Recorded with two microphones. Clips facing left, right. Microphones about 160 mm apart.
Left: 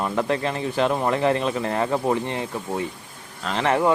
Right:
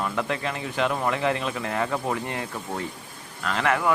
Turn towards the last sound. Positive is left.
turn(degrees=30)  # may be behind; listen again after turning